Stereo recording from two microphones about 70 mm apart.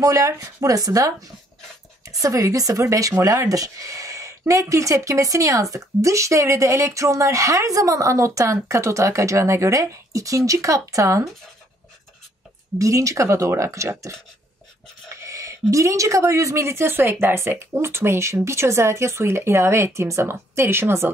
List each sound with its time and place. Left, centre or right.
0.0 s speech: right
12.7 s speech: right
15.2 s a sound: right
15.7 s speech: right